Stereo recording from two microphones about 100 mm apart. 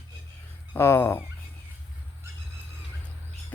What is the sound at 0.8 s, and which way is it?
Speech, 25° left (ahead or behind).